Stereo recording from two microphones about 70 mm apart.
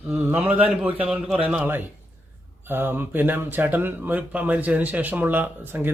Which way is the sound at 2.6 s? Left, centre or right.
Right.